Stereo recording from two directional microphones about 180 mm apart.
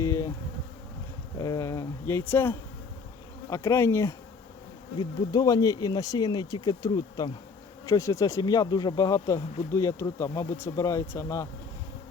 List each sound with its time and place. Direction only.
0.0 s bee: 15° left (ahead or behind)
1.4 s speech: 15° left (ahead or behind)